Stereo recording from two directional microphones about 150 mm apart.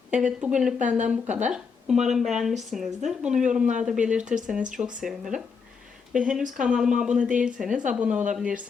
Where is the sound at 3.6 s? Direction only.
55° right (ahead or behind).